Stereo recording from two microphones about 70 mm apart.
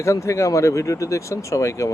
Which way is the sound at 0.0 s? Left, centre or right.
Left.